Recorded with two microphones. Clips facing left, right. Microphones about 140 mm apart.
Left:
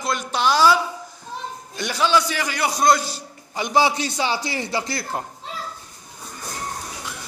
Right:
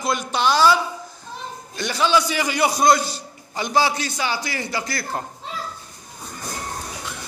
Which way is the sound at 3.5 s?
20° left (ahead or behind).